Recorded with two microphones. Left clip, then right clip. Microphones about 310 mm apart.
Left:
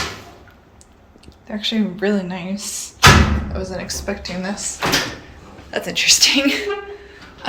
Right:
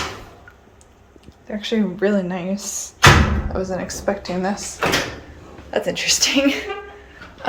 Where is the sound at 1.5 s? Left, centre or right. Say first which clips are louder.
Even; centre.